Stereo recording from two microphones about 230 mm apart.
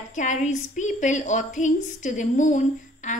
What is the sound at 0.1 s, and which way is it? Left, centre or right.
A woman's voice, left.